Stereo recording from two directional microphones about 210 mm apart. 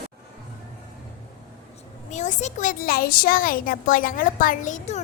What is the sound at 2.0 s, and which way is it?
A child's voice, 35° left (ahead or behind).